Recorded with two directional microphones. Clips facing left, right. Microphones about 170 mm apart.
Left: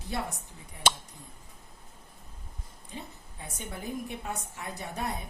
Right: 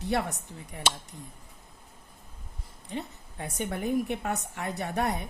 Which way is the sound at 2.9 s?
65° right (ahead or behind).